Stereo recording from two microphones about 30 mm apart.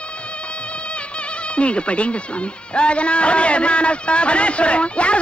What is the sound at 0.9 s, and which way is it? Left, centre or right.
Speech, left.